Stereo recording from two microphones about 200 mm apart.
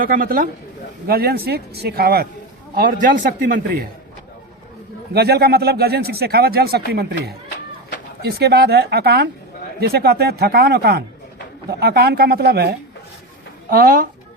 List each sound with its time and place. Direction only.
0.0 s speech: 45° right (ahead or behind)
5.1 s speech: 55° right (ahead or behind)
8.2 s speech: 55° right (ahead or behind)